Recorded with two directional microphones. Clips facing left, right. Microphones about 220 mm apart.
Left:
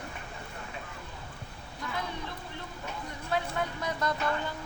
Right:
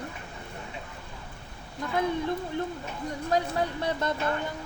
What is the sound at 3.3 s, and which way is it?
Speech, 35° right (ahead or behind).